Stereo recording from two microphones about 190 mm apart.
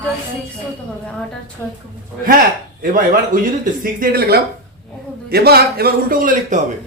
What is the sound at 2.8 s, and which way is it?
A man's voice, 50° right (ahead or behind).